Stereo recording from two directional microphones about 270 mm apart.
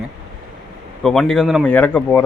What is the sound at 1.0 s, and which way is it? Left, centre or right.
A man's voice, centre.